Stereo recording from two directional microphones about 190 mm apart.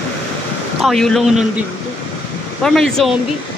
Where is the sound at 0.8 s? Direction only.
Centre (ahead or behind).